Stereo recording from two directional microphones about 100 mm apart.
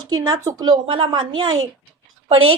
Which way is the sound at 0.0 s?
40° right (ahead or behind).